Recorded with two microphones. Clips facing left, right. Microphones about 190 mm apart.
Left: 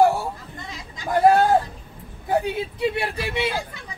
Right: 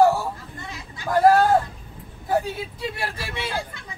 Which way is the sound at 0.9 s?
20° left (ahead or behind).